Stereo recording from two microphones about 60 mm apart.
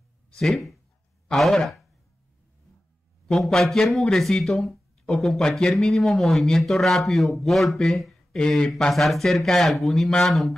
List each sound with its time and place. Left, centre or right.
0.4 s speech: centre
3.3 s speech: centre